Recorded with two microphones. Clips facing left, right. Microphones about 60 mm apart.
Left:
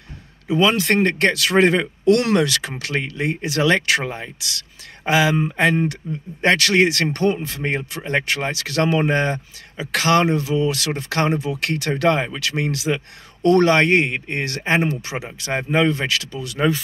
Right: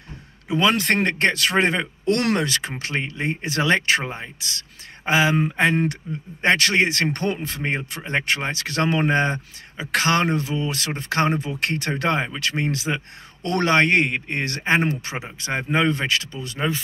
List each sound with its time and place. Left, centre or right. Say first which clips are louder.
0.6 s speech: left 2 dB; right
6.0 s speech: left 3 dB; centre
6.4 s speech: left 3 dB; right
16.5 s speech: left 5 dB; centre